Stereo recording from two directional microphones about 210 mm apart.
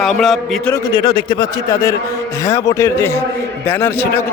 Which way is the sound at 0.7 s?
20° left (ahead or behind).